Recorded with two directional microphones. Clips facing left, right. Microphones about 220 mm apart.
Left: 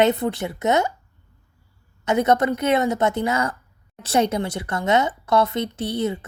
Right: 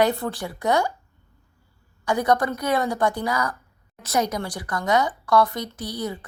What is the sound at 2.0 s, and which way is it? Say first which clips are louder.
A woman's voice: left 3 dB; 25° left (ahead or behind).